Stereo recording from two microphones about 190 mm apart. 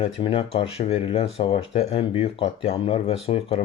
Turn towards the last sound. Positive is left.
turn(degrees=30)  # may be behind; listen again after turning